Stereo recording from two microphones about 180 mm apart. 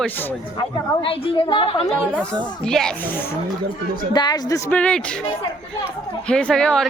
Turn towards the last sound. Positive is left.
turn(degrees=5)  # may be behind; listen again after turning